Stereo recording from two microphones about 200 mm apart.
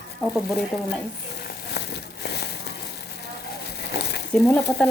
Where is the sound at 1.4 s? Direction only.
55° left (ahead or behind).